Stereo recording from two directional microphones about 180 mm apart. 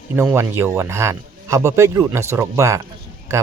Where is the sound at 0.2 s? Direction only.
15° right (ahead or behind).